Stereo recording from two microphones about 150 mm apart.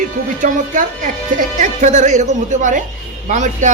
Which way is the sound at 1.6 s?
55° right (ahead or behind).